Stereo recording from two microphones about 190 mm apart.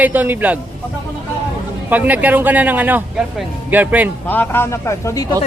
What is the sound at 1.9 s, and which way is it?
A man's voice, 10° right (ahead or behind).